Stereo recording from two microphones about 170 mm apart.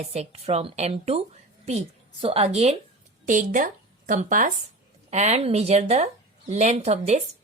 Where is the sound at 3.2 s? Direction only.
50° right (ahead or behind).